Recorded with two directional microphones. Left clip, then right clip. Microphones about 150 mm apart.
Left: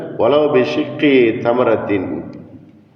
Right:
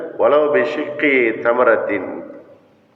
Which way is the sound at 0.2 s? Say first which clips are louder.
Left 1 dB; 35° left (ahead or behind).